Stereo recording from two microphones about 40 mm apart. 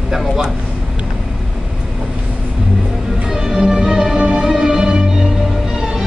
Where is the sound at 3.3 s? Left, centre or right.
Centre.